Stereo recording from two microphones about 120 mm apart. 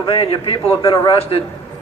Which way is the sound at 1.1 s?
50° left (ahead or behind).